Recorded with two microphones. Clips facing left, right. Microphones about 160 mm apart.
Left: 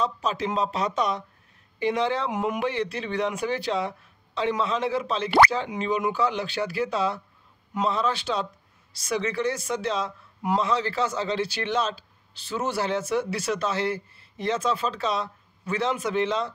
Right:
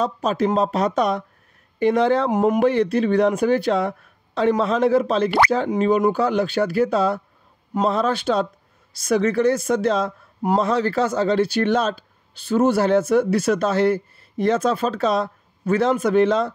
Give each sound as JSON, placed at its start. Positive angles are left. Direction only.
{"t": 0.0, "sound": "a man's voice", "side_deg": -50}